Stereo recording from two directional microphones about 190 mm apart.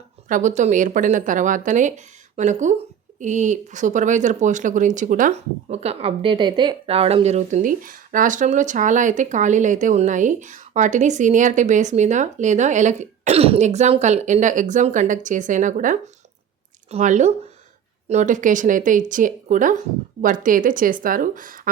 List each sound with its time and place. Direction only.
0.3 s speech: 40° right (ahead or behind)